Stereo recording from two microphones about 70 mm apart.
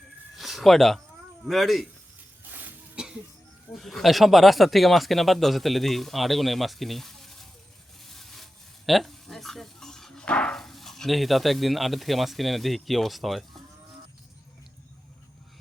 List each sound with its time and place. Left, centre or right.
0.3 s a sound: centre
1.5 s speech: centre
2.5 s cough: right
2.9 s a sound: centre
3.8 s speech: centre
8.0 s sawing: centre
8.9 s speech: centre